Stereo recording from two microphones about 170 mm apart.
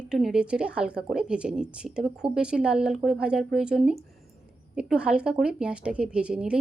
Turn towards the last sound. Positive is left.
turn(degrees=-5)  # may be behind; listen again after turning